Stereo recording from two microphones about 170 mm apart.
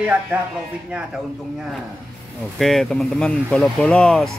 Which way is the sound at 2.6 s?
Centre (ahead or behind).